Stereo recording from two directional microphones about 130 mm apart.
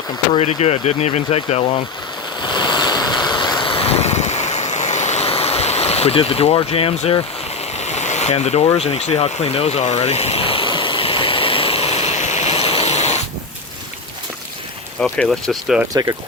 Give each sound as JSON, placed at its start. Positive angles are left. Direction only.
{"t": 0.3, "sound": "speech", "side_deg": 55}
{"t": 2.4, "sound": "vehicle", "side_deg": 35}
{"t": 7.8, "sound": "vehicle", "side_deg": 60}
{"t": 15.3, "sound": "speech", "side_deg": 0}
{"t": 15.9, "sound": "speech", "side_deg": -25}